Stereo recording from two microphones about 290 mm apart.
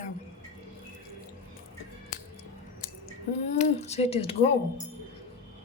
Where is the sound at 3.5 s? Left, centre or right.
Left.